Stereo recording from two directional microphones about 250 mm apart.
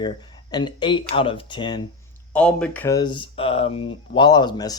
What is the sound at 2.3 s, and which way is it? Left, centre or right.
Speech, centre.